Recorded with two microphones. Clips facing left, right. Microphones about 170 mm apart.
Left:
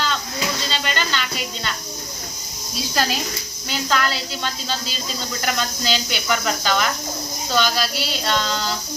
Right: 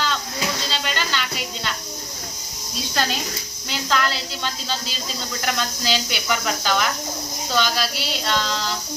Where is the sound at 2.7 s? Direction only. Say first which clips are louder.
Left 2 dB; 5° left (ahead or behind).